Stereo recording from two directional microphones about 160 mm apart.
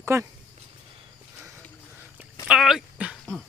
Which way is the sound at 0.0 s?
15° right (ahead or behind).